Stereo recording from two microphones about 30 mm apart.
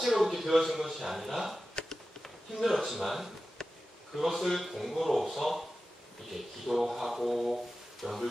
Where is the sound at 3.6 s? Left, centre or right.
Left.